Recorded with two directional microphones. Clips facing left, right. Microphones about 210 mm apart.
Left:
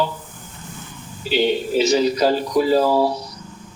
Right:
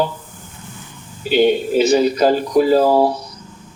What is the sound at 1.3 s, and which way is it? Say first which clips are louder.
Speech: right 4 dB; 50° right (ahead or behind).